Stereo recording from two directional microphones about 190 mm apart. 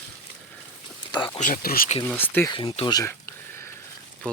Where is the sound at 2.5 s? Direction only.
25° left (ahead or behind).